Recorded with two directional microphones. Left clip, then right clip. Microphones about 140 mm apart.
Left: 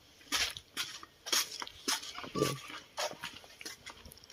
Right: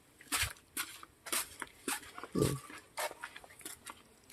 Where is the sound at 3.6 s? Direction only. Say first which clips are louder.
Left 7 dB; 15° right (ahead or behind).